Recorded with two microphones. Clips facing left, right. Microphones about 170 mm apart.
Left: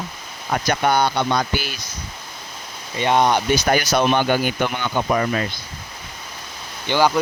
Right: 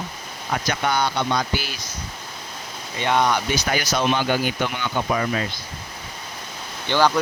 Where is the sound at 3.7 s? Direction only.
60° left (ahead or behind).